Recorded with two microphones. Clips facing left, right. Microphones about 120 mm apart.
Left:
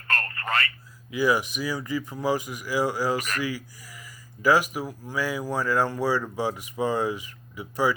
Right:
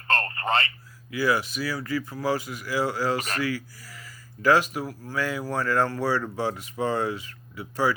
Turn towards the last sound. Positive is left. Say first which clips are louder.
# even
turn(degrees=15)  # may be behind; listen again after turning